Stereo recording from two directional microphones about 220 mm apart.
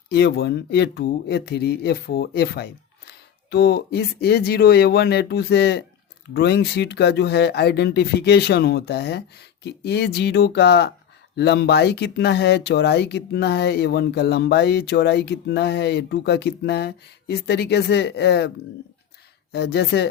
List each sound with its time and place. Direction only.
0.1 s speech: 50° left (ahead or behind)
19.5 s speech: 50° left (ahead or behind)